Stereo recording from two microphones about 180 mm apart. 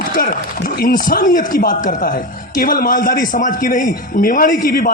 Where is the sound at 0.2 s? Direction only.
55° left (ahead or behind).